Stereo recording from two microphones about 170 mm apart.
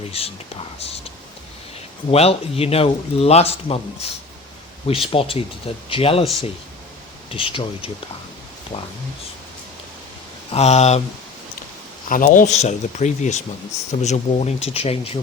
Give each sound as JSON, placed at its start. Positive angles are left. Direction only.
{"t": 0.0, "sound": "speech", "side_deg": 35}
{"t": 7.3, "sound": "speech", "side_deg": 30}
{"t": 8.7, "sound": "speech", "side_deg": 35}
{"t": 10.5, "sound": "speech", "side_deg": 40}
{"t": 12.0, "sound": "speech", "side_deg": 50}